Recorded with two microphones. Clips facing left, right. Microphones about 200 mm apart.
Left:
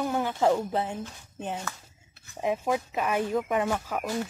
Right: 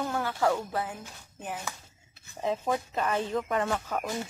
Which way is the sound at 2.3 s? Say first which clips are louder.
Left 2 dB; 10° left (ahead or behind).